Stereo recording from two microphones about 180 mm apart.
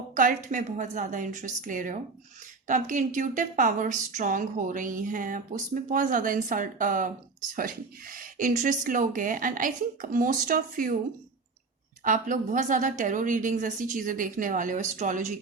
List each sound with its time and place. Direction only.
0.1 s a woman's voice: 45° right (ahead or behind)
12.0 s a woman's voice: 45° right (ahead or behind)